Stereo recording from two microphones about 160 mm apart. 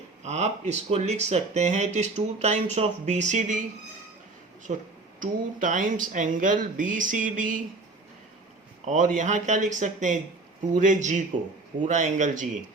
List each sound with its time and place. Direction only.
0.2 s speech: 45° right (ahead or behind)
4.7 s speech: 45° right (ahead or behind)
5.2 s speech: 55° right (ahead or behind)
8.8 s speech: 50° right (ahead or behind)